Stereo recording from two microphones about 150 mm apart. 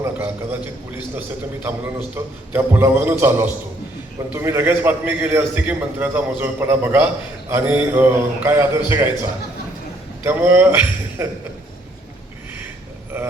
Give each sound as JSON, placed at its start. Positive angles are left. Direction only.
{"t": 0.0, "sound": "a man's voice", "side_deg": -15}
{"t": 10.2, "sound": "a man's voice", "side_deg": -15}